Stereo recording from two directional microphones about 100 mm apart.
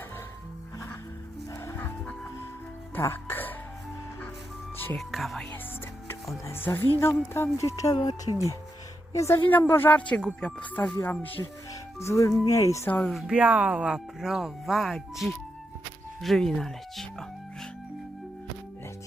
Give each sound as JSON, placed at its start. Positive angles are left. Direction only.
{"t": 1.5, "sound": "music", "side_deg": 30}
{"t": 3.0, "sound": "speech", "side_deg": 25}
{"t": 4.9, "sound": "speech", "side_deg": 0}
{"t": 6.4, "sound": "speech", "side_deg": 25}
{"t": 7.9, "sound": "speech", "side_deg": 45}
{"t": 9.1, "sound": "speech", "side_deg": 30}
{"t": 11.7, "sound": "music", "side_deg": 30}
{"t": 12.5, "sound": "speech", "side_deg": 30}
{"t": 13.1, "sound": "speech", "side_deg": -5}